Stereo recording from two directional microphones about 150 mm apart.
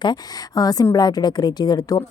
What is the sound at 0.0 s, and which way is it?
A woman's voice, 25° left (ahead or behind).